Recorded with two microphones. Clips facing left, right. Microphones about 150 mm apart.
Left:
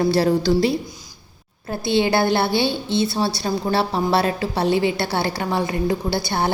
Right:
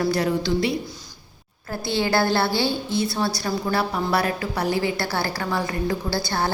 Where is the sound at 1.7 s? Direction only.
20° left (ahead or behind).